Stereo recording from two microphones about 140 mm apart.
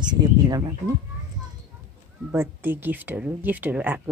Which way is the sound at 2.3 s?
15° right (ahead or behind).